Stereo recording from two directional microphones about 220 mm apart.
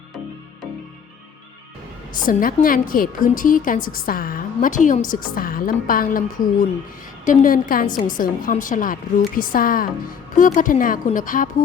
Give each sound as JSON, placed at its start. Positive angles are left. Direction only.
{"t": 2.2, "sound": "a woman's voice", "side_deg": 40}